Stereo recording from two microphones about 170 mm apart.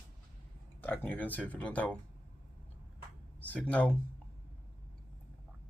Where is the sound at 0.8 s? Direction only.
10° left (ahead or behind).